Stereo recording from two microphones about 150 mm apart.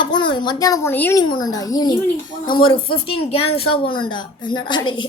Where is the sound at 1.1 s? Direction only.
30° left (ahead or behind).